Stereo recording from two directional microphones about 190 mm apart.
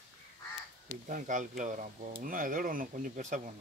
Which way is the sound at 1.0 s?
40° right (ahead or behind).